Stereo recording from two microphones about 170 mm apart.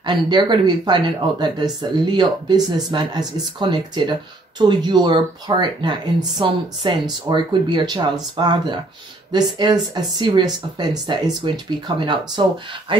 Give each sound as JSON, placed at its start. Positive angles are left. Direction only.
{"t": 0.0, "sound": "speech", "side_deg": -25}